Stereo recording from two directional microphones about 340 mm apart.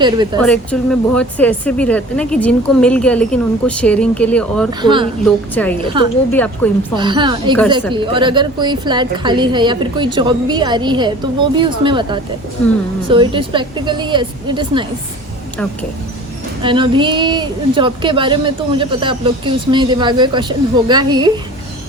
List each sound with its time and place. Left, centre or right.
0.4 s speech: centre
4.8 s a woman's voice: centre
5.2 s speech: centre
6.0 s a woman's voice: centre
6.3 s speech: centre
6.9 s a woman's voice: centre
16.6 s a woman's voice: centre